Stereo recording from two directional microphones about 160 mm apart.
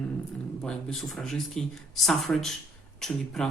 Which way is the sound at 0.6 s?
Centre (ahead or behind).